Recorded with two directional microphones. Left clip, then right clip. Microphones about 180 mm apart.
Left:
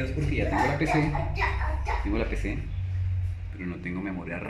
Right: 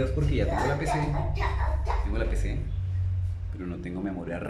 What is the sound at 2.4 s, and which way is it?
Speech, 15° left (ahead or behind).